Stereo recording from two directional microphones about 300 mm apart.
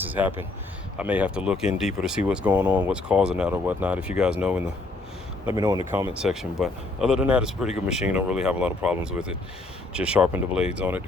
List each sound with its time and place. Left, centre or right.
0.0 s speech: centre